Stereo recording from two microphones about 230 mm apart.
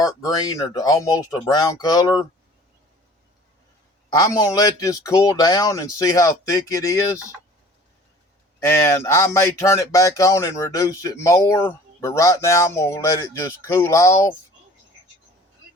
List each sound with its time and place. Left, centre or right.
0.0 s speech: centre
4.1 s speech: centre
8.6 s speech: centre